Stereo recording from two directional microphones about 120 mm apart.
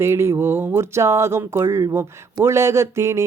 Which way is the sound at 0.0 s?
20° right (ahead or behind).